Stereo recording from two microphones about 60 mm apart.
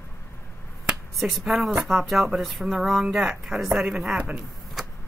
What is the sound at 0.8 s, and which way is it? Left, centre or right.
Speech, centre.